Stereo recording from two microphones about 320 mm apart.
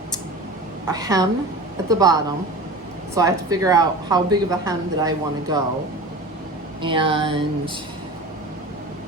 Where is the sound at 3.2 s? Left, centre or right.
Centre.